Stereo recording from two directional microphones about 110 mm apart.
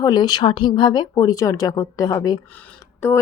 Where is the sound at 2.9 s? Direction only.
20° left (ahead or behind).